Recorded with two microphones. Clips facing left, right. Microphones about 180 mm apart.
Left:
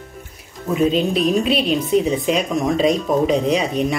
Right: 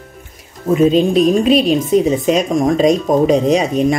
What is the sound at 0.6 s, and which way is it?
Speech, 45° right (ahead or behind).